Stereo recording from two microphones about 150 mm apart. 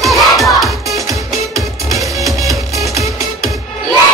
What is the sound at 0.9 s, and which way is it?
Music, 20° right (ahead or behind).